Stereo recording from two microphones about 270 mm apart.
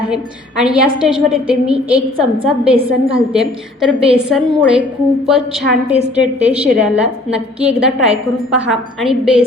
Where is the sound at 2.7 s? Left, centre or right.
Right.